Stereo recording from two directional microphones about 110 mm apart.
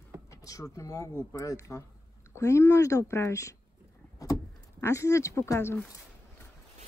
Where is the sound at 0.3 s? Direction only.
30° left (ahead or behind).